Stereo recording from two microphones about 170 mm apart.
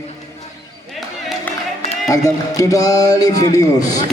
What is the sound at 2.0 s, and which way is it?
A man's voice, 20° left (ahead or behind).